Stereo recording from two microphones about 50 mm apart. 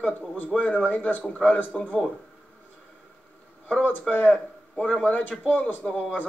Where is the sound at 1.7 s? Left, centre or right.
Centre.